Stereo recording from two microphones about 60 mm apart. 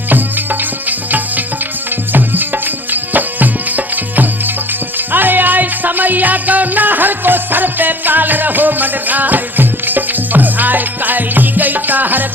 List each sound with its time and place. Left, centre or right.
2.1 s music: right